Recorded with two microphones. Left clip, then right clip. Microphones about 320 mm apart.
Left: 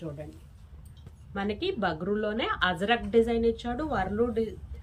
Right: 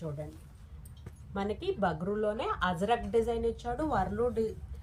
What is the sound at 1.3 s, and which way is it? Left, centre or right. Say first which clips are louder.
A woman's voice: left 3 dB; right.